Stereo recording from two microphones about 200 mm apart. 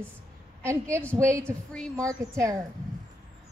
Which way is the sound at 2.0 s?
15° right (ahead or behind).